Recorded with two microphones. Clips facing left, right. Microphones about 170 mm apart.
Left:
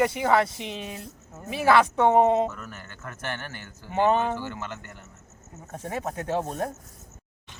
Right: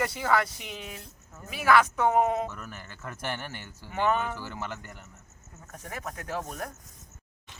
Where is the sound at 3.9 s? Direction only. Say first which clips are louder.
Left 5 dB; 25° left (ahead or behind).